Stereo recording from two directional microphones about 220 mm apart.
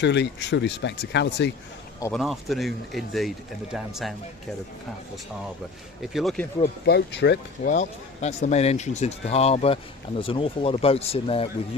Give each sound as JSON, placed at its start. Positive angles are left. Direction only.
{"t": 0.0, "sound": "speech", "side_deg": 50}
{"t": 2.1, "sound": "speech", "side_deg": 0}
{"t": 6.0, "sound": "speech", "side_deg": 0}
{"t": 6.8, "sound": "speech", "side_deg": 50}
{"t": 7.7, "sound": "speech", "side_deg": 30}